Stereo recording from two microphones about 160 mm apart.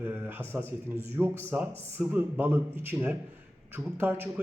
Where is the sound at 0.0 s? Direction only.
10° right (ahead or behind).